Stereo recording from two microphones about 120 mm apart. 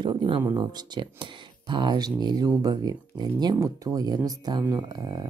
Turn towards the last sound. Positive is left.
turn(degrees=-35)  # may be behind; listen again after turning